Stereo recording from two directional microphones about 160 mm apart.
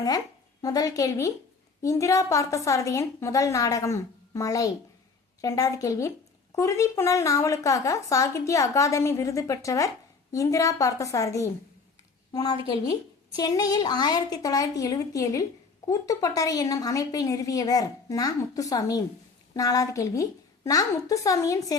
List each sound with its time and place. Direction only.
0.6 s speech: 20° left (ahead or behind)